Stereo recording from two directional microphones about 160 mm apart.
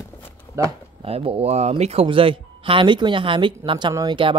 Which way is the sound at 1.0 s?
35° right (ahead or behind).